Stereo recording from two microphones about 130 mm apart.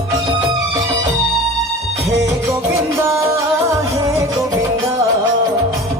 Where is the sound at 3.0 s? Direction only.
20° right (ahead or behind).